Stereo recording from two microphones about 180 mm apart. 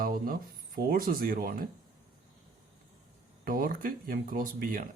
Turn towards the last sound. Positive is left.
turn(degrees=-50)  # may be behind; listen again after turning